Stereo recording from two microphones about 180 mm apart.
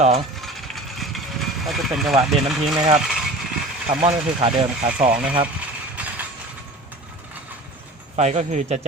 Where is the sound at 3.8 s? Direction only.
30° right (ahead or behind).